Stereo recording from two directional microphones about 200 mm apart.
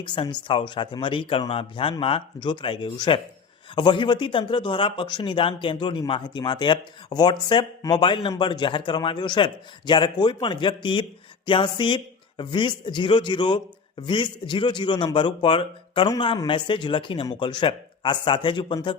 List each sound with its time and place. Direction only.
0.0 s speech: 25° left (ahead or behind)